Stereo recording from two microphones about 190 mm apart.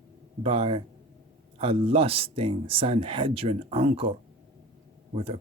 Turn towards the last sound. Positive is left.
turn(degrees=-30)  # may be behind; listen again after turning